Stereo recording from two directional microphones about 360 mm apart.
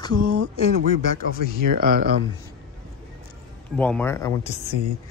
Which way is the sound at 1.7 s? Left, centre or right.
Right.